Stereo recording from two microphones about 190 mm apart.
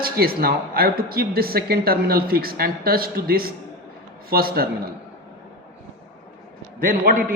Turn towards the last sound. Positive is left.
turn(degrees=-50)  # may be behind; listen again after turning